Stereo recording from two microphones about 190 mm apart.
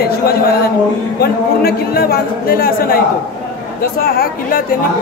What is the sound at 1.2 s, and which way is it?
Speech, 55° left (ahead or behind).